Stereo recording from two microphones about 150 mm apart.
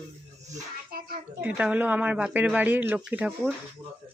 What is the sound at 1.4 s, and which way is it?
Speech, 10° right (ahead or behind).